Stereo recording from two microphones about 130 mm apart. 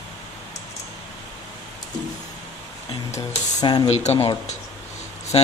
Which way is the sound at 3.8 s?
55° left (ahead or behind).